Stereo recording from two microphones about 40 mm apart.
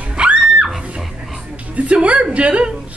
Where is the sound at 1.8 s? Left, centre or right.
Right.